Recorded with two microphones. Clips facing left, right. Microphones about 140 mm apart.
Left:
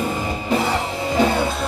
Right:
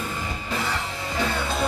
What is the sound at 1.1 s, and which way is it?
Music, 20° left (ahead or behind).